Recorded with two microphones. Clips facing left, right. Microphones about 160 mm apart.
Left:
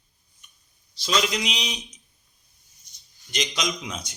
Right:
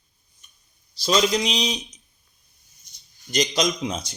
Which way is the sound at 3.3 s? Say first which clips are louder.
Right 6 dB; 35° right (ahead or behind).